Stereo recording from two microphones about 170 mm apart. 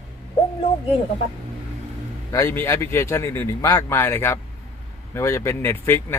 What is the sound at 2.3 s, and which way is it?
Speech, 15° left (ahead or behind).